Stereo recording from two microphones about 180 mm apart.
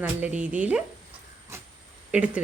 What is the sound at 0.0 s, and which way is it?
Speech, 10° right (ahead or behind).